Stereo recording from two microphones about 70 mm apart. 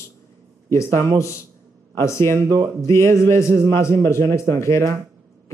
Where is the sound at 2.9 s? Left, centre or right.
Left.